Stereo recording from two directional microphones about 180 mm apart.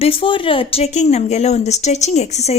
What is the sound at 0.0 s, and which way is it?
Speech, 30° left (ahead or behind).